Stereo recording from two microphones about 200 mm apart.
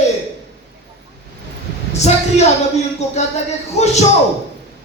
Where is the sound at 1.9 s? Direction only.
35° left (ahead or behind).